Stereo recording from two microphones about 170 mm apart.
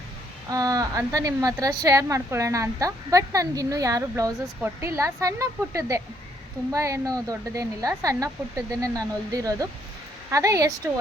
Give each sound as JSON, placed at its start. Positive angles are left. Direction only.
{"t": 0.5, "sound": "a woman's voice", "side_deg": -20}